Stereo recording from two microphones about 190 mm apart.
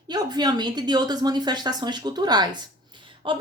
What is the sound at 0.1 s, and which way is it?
A woman's voice, 20° right (ahead or behind).